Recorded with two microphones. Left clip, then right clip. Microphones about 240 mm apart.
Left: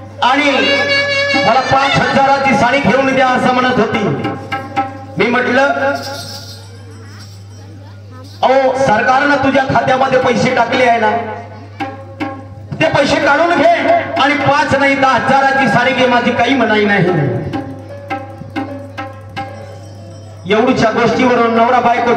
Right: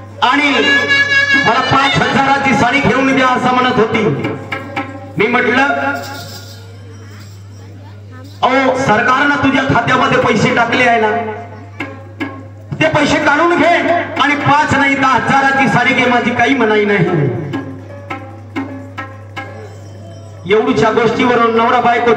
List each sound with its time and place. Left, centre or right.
0.2 s a man's voice: centre
8.4 s a man's voice: centre
12.7 s a man's voice: centre
18.0 s tabla: centre
20.4 s a man's voice: centre